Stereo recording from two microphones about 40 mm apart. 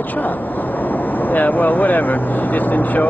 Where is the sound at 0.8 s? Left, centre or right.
Left.